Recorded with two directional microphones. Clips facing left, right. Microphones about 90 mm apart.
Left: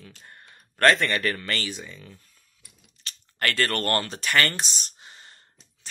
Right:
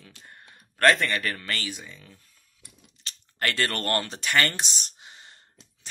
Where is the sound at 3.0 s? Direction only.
20° right (ahead or behind).